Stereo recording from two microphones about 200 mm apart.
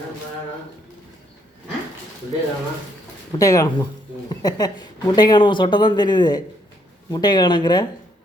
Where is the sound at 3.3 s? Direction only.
15° left (ahead or behind).